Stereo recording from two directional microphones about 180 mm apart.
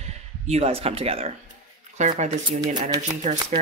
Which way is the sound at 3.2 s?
40° right (ahead or behind).